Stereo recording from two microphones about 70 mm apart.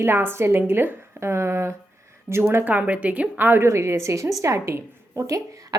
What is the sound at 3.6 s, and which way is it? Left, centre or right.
A woman's voice, right.